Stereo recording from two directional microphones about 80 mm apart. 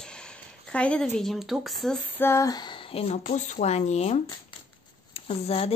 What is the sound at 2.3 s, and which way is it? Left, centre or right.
Speech, left.